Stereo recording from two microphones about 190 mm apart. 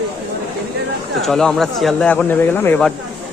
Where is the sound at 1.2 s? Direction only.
Centre (ahead or behind).